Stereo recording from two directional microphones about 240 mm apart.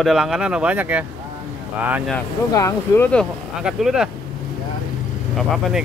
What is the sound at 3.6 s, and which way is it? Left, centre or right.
Speech, centre.